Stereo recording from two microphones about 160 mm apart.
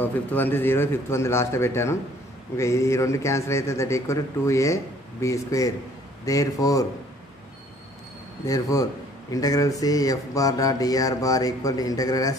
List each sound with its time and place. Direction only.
0.0 s a man's voice: 10° left (ahead or behind)
8.5 s speech: 20° left (ahead or behind)